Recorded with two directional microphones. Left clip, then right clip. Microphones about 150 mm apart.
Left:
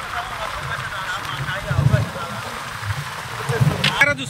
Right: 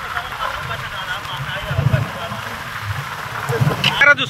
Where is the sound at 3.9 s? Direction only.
10° left (ahead or behind).